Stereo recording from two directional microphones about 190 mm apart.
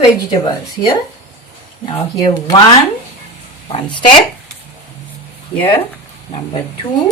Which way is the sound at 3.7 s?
25° left (ahead or behind).